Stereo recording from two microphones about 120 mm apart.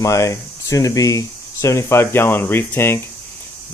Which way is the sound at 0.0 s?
25° left (ahead or behind).